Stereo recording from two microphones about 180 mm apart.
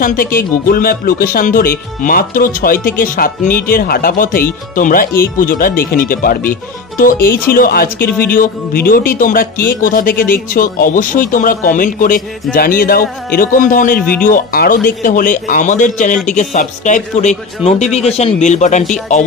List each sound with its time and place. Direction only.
0.0 s speech: 50° left (ahead or behind)